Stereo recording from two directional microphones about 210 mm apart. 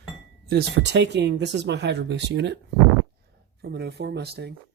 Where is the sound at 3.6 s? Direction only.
50° right (ahead or behind).